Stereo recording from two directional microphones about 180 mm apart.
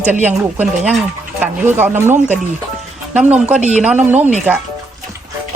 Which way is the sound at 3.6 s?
40° right (ahead or behind).